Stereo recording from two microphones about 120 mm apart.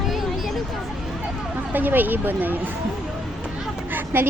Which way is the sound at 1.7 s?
15° right (ahead or behind).